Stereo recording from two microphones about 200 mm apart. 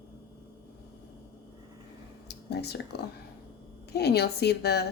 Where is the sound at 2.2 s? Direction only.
55° left (ahead or behind).